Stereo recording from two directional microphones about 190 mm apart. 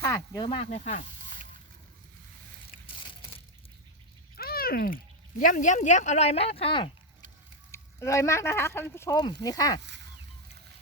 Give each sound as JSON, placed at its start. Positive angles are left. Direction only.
{"t": 0.0, "sound": "speech", "side_deg": 20}
{"t": 4.4, "sound": "a sound", "side_deg": 50}
{"t": 5.4, "sound": "speech", "side_deg": 45}
{"t": 7.7, "sound": "speech", "side_deg": 15}